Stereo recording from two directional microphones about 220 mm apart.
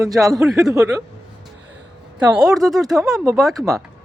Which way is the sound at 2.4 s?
Centre (ahead or behind).